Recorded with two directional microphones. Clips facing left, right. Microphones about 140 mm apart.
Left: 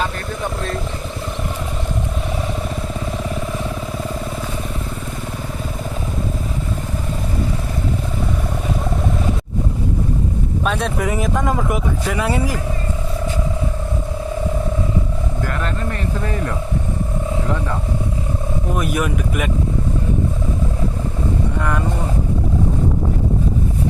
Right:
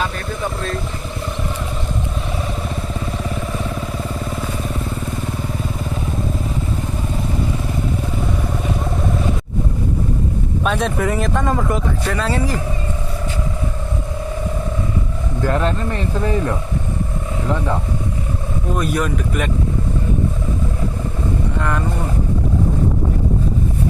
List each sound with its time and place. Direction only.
10.6 s speech: centre (ahead or behind)
15.4 s speech: 30° right (ahead or behind)
18.7 s speech: 15° left (ahead or behind)